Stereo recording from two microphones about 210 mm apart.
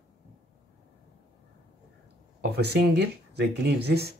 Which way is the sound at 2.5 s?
50° right (ahead or behind).